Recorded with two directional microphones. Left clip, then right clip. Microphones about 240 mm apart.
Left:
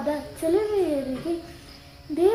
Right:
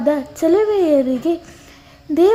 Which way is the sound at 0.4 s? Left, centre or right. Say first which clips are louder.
Right 8 dB; right.